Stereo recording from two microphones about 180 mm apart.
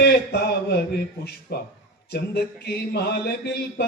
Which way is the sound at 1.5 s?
60° left (ahead or behind).